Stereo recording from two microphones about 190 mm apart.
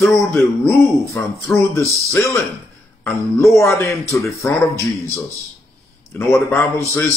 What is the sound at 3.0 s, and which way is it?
Speech, 10° left (ahead or behind).